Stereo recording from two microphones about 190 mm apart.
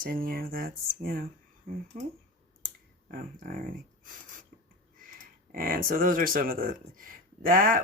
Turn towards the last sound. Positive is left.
turn(degrees=-45)  # may be behind; listen again after turning